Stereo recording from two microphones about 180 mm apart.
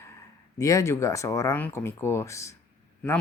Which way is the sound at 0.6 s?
15° left (ahead or behind).